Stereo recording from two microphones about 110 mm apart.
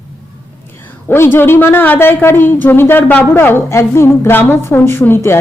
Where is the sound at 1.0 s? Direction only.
20° left (ahead or behind).